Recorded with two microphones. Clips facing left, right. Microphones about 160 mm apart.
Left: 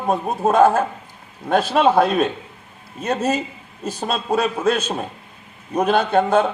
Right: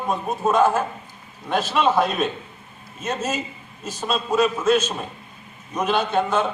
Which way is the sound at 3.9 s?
60° left (ahead or behind).